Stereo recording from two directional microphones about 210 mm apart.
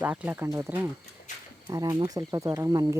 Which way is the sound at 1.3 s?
35° left (ahead or behind).